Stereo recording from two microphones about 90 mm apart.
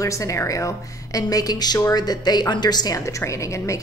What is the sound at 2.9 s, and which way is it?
Speech, 35° left (ahead or behind).